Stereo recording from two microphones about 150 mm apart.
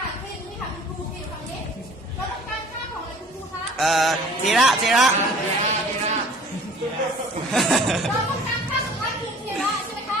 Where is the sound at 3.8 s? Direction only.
Centre (ahead or behind).